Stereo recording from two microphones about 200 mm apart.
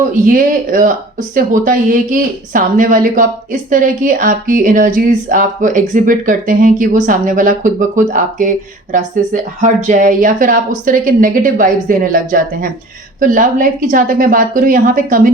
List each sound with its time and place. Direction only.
0.1 s speech: 45° right (ahead or behind)